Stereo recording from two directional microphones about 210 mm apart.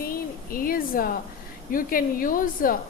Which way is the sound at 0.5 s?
40° left (ahead or behind).